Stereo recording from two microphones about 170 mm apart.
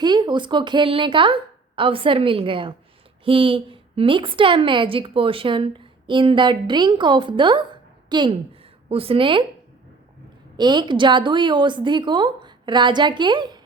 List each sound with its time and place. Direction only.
0.0 s a woman's voice: 25° right (ahead or behind)
10.6 s a woman's voice: 25° right (ahead or behind)